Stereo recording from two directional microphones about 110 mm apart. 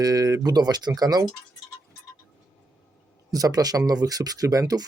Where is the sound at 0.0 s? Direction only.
35° right (ahead or behind).